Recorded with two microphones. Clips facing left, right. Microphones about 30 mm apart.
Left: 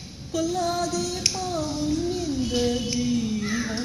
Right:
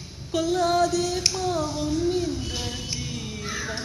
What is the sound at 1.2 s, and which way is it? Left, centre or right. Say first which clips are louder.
Child singing: right 2 dB; right.